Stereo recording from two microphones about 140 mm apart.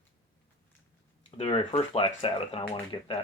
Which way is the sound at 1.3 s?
45° left (ahead or behind).